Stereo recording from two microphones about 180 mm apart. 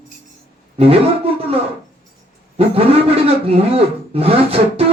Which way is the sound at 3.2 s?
35° right (ahead or behind).